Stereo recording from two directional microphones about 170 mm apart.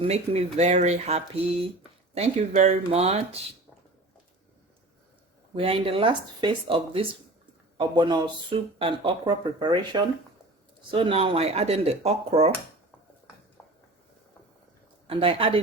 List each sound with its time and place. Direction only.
0.0 s speech: 35° right (ahead or behind)
5.5 s speech: 35° right (ahead or behind)
15.0 s speech: 30° right (ahead or behind)